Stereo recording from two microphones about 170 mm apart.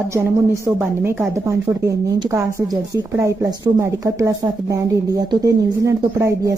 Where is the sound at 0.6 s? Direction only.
15° right (ahead or behind).